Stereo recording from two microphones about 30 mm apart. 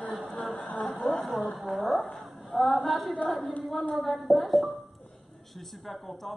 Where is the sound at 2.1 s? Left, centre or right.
Centre.